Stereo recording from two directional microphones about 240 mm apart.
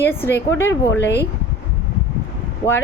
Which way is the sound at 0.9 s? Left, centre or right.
Left.